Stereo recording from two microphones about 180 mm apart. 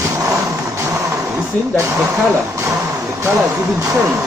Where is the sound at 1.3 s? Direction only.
20° right (ahead or behind).